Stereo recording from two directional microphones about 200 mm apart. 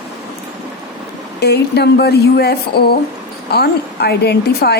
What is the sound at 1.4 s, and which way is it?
Speech, 55° left (ahead or behind).